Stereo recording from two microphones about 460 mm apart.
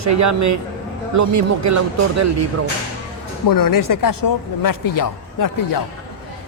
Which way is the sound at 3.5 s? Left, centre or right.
Left.